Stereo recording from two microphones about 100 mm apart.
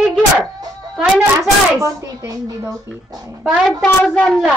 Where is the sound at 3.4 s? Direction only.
5° left (ahead or behind).